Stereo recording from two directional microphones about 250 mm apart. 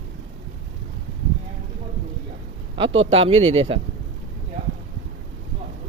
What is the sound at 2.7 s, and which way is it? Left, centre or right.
A man's voice, right.